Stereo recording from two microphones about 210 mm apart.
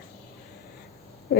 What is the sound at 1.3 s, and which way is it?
Speech, 50° left (ahead or behind).